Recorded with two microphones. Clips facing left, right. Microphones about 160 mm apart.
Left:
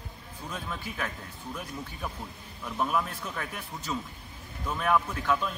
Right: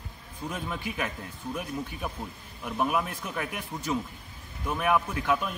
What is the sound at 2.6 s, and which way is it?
A man's voice, 15° right (ahead or behind).